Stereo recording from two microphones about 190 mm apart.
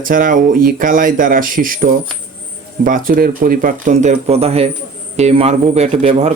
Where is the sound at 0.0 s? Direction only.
45° right (ahead or behind).